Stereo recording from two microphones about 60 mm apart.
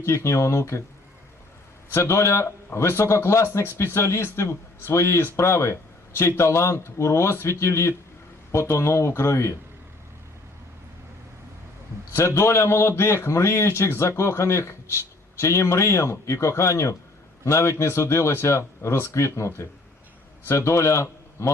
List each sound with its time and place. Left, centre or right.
0.0 s speech: left
1.9 s speech: left
12.1 s a man's voice: left